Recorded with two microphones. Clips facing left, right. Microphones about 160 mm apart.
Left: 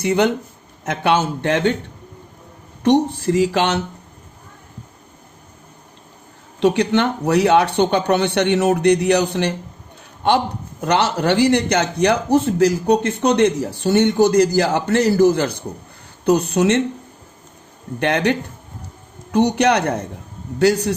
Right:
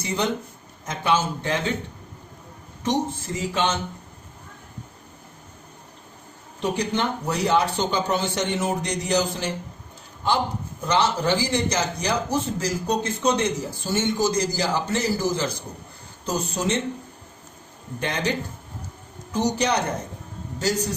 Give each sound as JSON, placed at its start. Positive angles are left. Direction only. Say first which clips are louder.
{"t": 0.0, "sound": "a man's voice", "louder": "left 8 dB", "side_deg": 65}
{"t": 2.8, "sound": "speech", "louder": "left 9 dB", "side_deg": 70}
{"t": 6.6, "sound": "a man's voice", "louder": "left 8 dB", "side_deg": 75}
{"t": 18.0, "sound": "a man's voice", "louder": "left 8 dB", "side_deg": 65}